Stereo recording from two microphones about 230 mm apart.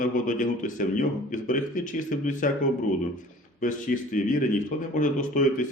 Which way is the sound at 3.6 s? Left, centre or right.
Left.